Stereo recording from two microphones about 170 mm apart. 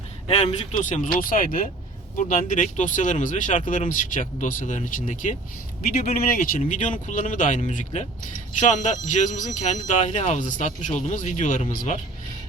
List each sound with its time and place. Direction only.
0.3 s speech: 35° left (ahead or behind)
0.9 s speech: 50° left (ahead or behind)